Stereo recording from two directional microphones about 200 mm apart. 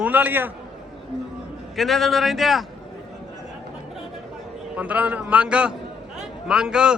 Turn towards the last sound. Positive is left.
turn(degrees=-5)  # may be behind; listen again after turning